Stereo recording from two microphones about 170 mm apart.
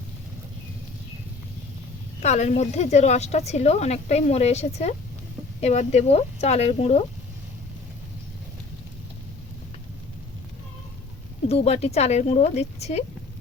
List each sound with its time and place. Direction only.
2.2 s a woman's voice: 40° left (ahead or behind)
11.4 s a woman's voice: 40° left (ahead or behind)